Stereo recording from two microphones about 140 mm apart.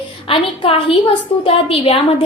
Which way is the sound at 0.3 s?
40° left (ahead or behind).